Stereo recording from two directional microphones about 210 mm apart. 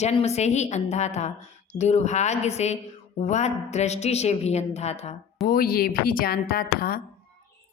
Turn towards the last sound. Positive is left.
turn(degrees=45)  # may be behind; listen again after turning